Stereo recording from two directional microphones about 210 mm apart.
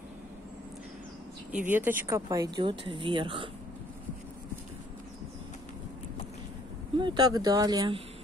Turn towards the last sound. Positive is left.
turn(degrees=-20)  # may be behind; listen again after turning